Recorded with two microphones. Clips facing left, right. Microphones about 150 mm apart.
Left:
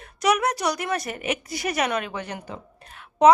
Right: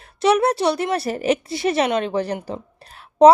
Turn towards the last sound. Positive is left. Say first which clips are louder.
# right 5 dB
turn(degrees=-35)  # may be behind; listen again after turning